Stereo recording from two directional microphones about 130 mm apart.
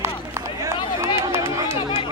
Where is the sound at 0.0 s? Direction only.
20° right (ahead or behind).